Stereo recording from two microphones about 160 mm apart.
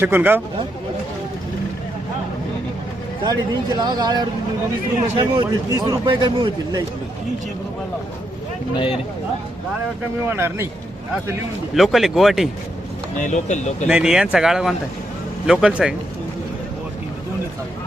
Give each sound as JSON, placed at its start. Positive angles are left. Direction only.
{"t": 0.0, "sound": "speech", "side_deg": -10}
{"t": 3.2, "sound": "speech", "side_deg": -25}
{"t": 8.7, "sound": "speech", "side_deg": 35}
{"t": 10.2, "sound": "speech", "side_deg": -15}
{"t": 11.7, "sound": "speech", "side_deg": 0}
{"t": 13.1, "sound": "speech", "side_deg": 50}
{"t": 13.8, "sound": "speech", "side_deg": -5}